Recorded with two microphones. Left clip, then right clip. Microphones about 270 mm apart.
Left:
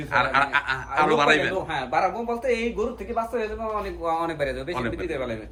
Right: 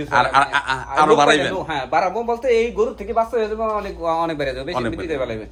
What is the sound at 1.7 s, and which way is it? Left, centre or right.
A man's voice, right.